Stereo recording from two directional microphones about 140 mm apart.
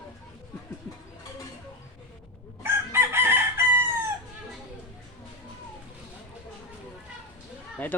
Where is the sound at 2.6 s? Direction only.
15° right (ahead or behind).